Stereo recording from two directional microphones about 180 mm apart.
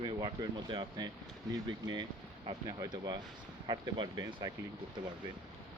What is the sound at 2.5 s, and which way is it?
Speech, 20° right (ahead or behind).